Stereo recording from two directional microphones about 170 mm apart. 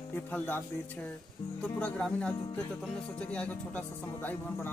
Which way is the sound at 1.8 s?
5° left (ahead or behind).